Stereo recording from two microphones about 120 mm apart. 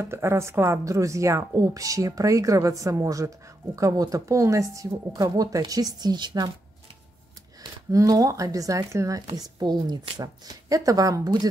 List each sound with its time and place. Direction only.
0.0 s speech: 20° right (ahead or behind)
7.9 s speech: 30° right (ahead or behind)